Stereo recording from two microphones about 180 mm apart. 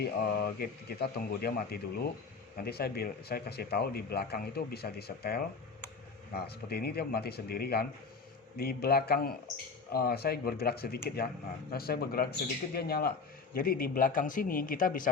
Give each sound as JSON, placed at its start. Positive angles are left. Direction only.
{"t": 0.0, "sound": "a man's voice", "side_deg": 60}